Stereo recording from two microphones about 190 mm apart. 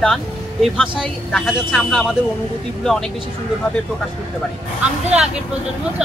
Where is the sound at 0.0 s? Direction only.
5° left (ahead or behind).